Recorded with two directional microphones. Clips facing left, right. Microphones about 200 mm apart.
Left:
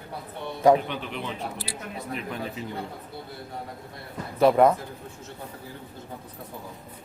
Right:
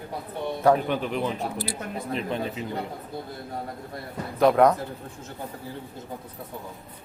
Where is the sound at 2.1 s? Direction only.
20° right (ahead or behind).